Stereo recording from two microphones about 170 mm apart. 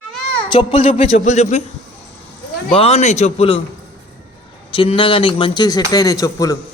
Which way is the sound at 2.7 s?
35° left (ahead or behind).